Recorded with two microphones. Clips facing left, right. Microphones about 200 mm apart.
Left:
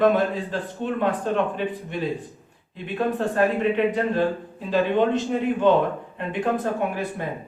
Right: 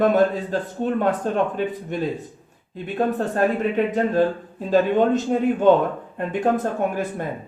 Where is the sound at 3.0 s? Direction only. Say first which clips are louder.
Right 1 dB; 45° right (ahead or behind).